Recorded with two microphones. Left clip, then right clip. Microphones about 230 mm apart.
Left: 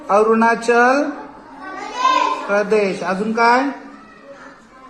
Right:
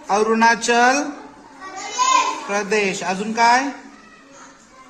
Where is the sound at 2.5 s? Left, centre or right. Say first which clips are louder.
Left 4 dB; right.